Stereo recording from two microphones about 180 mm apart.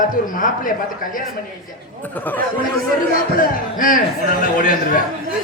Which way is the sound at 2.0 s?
10° left (ahead or behind).